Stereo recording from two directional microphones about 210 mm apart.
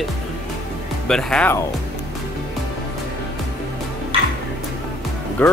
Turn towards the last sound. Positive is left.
turn(degrees=5)  # may be behind; listen again after turning